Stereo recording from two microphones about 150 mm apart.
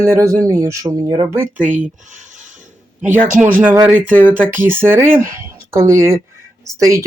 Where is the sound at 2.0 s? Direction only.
55° right (ahead or behind).